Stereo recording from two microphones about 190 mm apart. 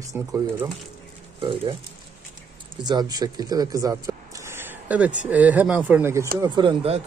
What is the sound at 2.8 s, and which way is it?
Speech, 20° right (ahead or behind).